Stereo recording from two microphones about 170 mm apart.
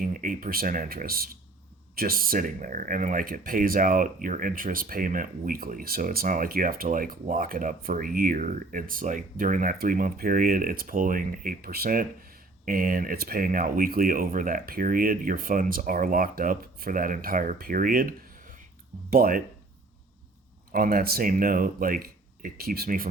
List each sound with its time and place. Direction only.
0.0 s speech: 55° right (ahead or behind)
20.7 s speech: 60° right (ahead or behind)